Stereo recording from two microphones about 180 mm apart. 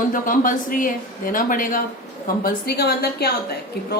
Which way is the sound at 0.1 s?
50° left (ahead or behind).